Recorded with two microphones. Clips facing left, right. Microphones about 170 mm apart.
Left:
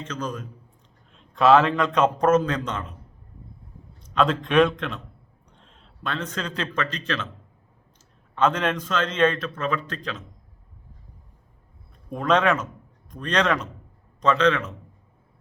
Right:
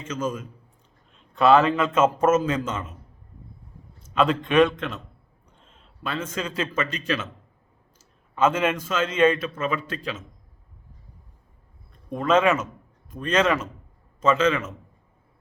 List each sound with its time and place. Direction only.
0.0 s a man's voice: 5° right (ahead or behind)
4.0 s a man's voice: 5° right (ahead or behind)
5.5 s a sound: centre (ahead or behind)
6.3 s a man's voice: 5° right (ahead or behind)
12.0 s a man's voice: centre (ahead or behind)